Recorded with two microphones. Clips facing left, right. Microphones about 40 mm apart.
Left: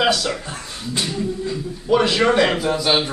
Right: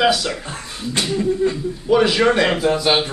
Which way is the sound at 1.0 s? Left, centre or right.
Right.